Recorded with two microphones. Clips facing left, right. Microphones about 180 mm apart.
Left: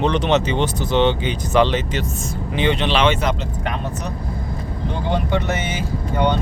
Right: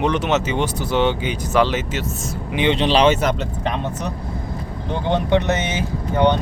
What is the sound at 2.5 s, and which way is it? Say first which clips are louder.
Speech: right 1 dB; 15° right (ahead or behind).